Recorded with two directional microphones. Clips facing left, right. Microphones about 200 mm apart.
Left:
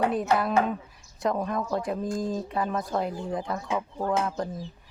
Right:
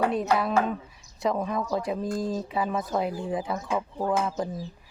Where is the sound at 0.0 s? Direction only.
Centre (ahead or behind).